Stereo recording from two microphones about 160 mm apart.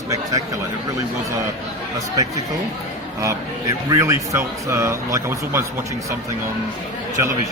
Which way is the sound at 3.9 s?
20° right (ahead or behind).